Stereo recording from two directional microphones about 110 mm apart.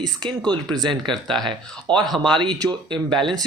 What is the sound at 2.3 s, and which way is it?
Speech, 45° right (ahead or behind).